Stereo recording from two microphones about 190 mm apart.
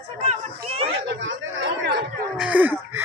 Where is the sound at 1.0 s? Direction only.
70° right (ahead or behind).